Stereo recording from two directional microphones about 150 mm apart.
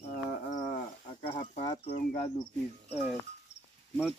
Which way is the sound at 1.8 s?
45° left (ahead or behind).